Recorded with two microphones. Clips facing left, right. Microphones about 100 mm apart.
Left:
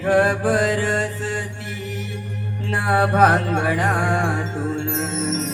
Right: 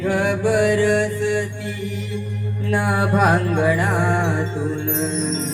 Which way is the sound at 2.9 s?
30° left (ahead or behind).